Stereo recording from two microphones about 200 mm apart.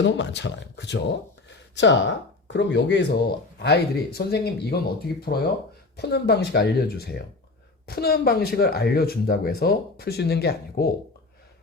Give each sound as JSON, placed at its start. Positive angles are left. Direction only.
{"t": 0.0, "sound": "speech", "side_deg": 60}